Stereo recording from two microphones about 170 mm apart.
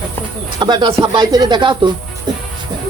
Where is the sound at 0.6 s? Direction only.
25° right (ahead or behind).